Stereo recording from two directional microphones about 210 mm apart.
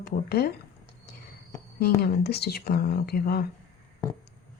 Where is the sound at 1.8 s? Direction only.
50° left (ahead or behind).